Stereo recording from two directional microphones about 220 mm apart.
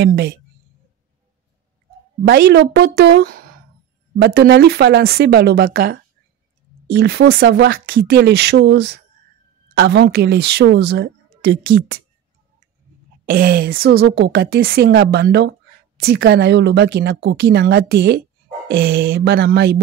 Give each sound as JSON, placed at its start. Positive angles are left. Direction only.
{"t": 0.0, "sound": "a woman's voice", "side_deg": -50}
{"t": 2.2, "sound": "a woman's voice", "side_deg": -45}
{"t": 13.2, "sound": "a woman's voice", "side_deg": -40}